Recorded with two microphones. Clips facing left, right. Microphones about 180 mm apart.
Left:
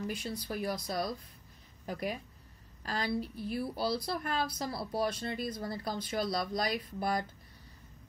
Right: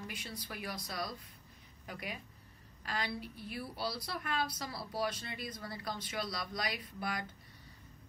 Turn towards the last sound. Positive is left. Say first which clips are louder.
# left 7 dB
turn(degrees=40)  # may be behind; listen again after turning